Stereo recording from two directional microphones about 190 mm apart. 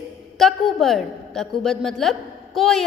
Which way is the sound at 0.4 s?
Centre (ahead or behind).